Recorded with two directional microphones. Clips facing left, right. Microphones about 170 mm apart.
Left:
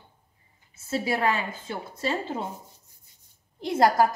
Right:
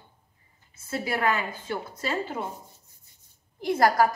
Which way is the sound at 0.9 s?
25° left (ahead or behind).